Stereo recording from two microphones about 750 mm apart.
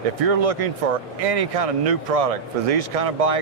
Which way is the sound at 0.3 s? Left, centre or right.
Right.